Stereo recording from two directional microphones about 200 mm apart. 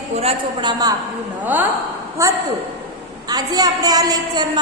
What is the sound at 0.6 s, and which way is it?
Speech, 20° right (ahead or behind).